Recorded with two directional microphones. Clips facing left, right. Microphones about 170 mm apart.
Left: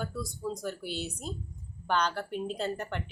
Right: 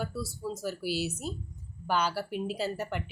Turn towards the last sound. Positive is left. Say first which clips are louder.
# right 1 dB
turn(degrees=-5)  # may be behind; listen again after turning